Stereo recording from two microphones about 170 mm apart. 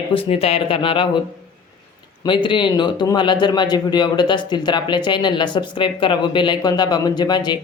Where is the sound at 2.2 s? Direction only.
30° left (ahead or behind).